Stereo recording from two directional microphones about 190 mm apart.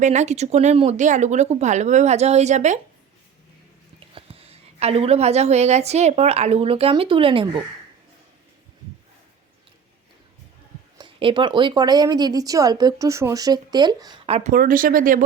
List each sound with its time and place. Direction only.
0.0 s speech: 40° right (ahead or behind)
4.1 s a woman's voice: 30° right (ahead or behind)
10.9 s speech: 25° right (ahead or behind)
14.3 s speech: 40° right (ahead or behind)